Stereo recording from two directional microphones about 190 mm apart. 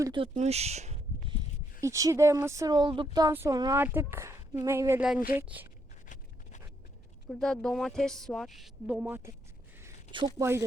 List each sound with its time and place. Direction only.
0.0 s speech: 25° right (ahead or behind)
0.3 s a sound: 35° right (ahead or behind)
1.8 s speech: 15° right (ahead or behind)
7.3 s a woman's voice: 5° left (ahead or behind)
10.1 s speech: 25° right (ahead or behind)